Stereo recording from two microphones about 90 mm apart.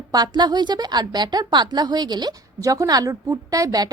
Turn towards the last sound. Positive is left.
turn(degrees=-45)  # may be behind; listen again after turning